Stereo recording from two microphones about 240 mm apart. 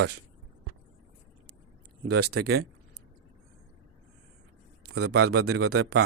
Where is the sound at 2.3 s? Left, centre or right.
Right.